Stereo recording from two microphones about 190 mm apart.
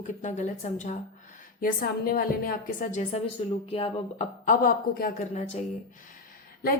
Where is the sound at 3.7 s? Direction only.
30° left (ahead or behind).